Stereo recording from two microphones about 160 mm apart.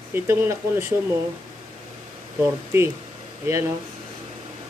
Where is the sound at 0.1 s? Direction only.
15° right (ahead or behind).